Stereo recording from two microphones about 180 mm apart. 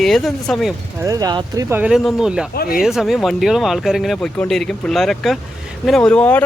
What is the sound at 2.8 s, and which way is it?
A man's voice, centre (ahead or behind).